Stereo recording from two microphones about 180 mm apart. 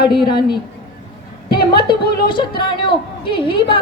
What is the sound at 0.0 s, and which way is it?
Speech, 25° left (ahead or behind).